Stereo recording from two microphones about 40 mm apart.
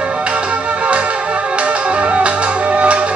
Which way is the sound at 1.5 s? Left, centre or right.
Right.